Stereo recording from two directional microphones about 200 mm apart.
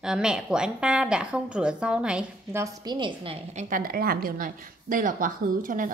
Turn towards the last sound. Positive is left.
turn(degrees=-40)  # may be behind; listen again after turning